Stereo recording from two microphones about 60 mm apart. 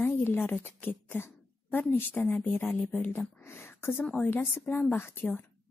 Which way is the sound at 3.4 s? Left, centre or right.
Left.